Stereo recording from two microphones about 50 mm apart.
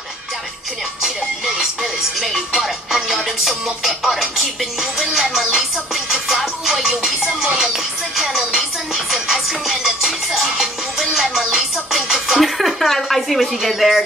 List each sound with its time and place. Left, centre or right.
1.0 s music: centre